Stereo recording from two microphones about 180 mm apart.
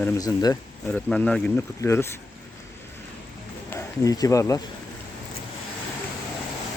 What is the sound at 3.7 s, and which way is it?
Speech, 15° left (ahead or behind).